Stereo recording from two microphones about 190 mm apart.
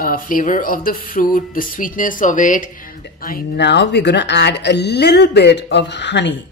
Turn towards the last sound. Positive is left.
turn(degrees=65)  # may be behind; listen again after turning